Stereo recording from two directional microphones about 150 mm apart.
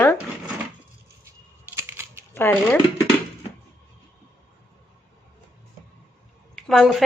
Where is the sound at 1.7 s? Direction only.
15° right (ahead or behind).